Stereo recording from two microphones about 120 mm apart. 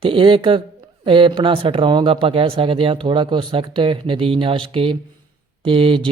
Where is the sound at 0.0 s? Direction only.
45° right (ahead or behind).